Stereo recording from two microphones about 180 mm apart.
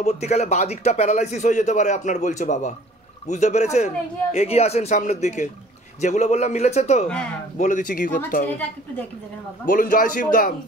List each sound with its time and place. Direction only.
0.0 s a man's voice: 35° left (ahead or behind)
9.7 s a man's voice: 50° left (ahead or behind)